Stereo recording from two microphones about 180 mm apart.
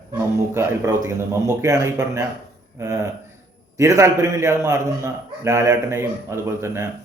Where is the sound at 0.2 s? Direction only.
15° right (ahead or behind).